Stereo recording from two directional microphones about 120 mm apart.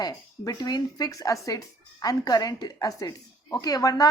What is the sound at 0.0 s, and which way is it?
Speech, 30° left (ahead or behind).